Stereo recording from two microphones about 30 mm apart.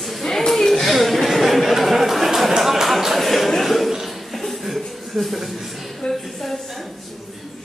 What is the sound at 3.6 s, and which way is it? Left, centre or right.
Chuckle, centre.